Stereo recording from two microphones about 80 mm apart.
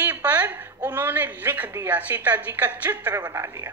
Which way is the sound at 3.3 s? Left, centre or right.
Right.